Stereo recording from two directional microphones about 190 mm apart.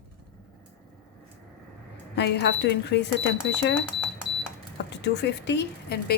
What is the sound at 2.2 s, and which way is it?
Speech, 65° left (ahead or behind).